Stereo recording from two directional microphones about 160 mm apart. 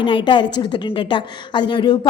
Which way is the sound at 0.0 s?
30° left (ahead or behind).